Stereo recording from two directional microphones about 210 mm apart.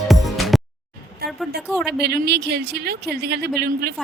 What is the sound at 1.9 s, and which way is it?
Speech, 50° right (ahead or behind).